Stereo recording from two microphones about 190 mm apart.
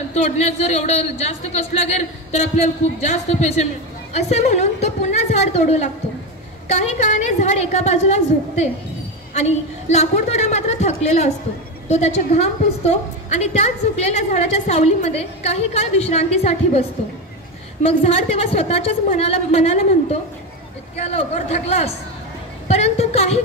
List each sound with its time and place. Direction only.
0.1 s a woman's voice: 35° left (ahead or behind)
17.8 s a woman's voice: 30° left (ahead or behind)